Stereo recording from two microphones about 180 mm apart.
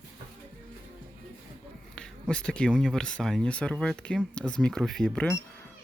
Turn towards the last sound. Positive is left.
turn(degrees=5)  # may be behind; listen again after turning